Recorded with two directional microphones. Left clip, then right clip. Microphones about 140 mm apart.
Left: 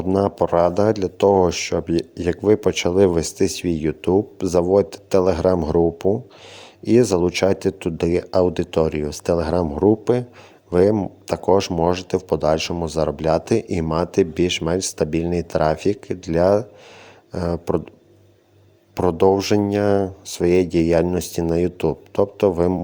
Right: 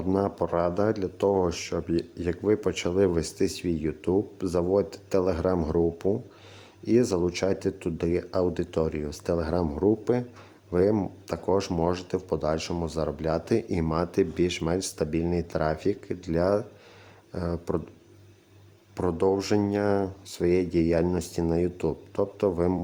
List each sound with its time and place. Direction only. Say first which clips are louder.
0.1 s speech: left 8 dB; 30° left (ahead or behind)
18.9 s speech: left 9 dB; 30° left (ahead or behind)